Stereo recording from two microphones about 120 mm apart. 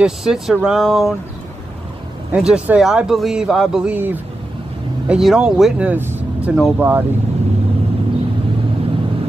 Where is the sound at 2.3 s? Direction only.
10° right (ahead or behind).